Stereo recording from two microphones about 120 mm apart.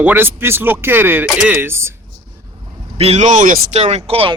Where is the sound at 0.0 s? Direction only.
15° right (ahead or behind).